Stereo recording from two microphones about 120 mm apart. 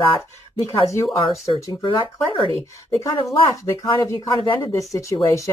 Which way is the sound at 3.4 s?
25° left (ahead or behind).